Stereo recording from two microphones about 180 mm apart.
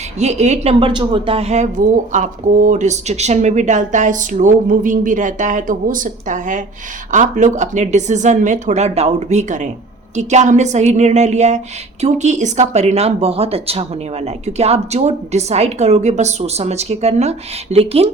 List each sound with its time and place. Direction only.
0.2 s a woman's voice: 40° right (ahead or behind)